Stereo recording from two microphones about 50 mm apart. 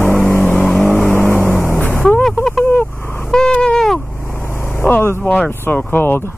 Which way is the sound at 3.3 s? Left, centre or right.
Centre.